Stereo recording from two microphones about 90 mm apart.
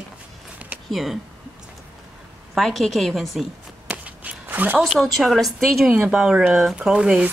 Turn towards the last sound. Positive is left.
turn(degrees=-10)  # may be behind; listen again after turning